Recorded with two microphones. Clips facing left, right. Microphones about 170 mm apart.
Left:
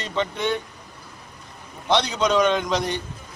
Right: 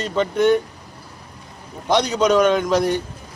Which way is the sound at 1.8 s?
10° right (ahead or behind).